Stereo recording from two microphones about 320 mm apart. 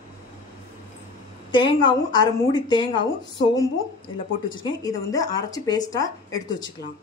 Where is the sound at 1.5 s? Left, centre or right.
Centre.